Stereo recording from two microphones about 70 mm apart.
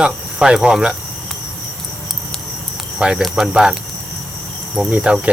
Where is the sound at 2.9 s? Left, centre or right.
Centre.